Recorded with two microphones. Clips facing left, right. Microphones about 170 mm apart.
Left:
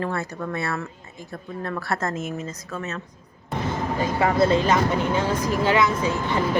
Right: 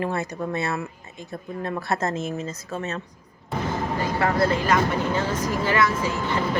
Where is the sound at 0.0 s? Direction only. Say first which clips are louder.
Right 1 dB; 20° right (ahead or behind).